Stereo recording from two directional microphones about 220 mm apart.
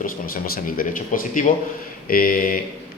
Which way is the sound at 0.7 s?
35° left (ahead or behind).